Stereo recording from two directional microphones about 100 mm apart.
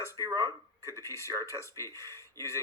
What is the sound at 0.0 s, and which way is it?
Speech, 30° right (ahead or behind).